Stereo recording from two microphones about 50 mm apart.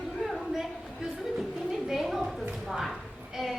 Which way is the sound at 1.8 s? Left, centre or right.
Centre.